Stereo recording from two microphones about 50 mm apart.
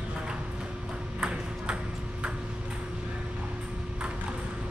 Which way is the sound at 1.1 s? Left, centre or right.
Right.